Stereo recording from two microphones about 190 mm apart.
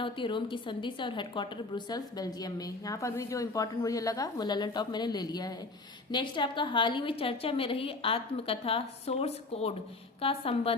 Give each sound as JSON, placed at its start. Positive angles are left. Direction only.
{"t": 0.0, "sound": "a woman's voice", "side_deg": 25}